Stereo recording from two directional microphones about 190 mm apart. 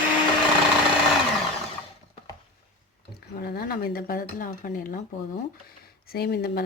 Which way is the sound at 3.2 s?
55° left (ahead or behind).